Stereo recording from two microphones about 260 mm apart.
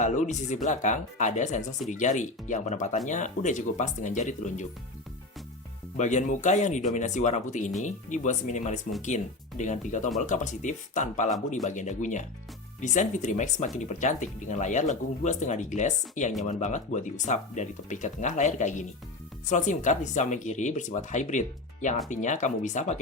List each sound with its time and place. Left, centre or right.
0.0 s speech: left
6.0 s speech: left